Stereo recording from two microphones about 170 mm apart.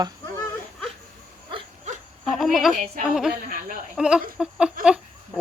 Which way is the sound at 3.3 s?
60° right (ahead or behind).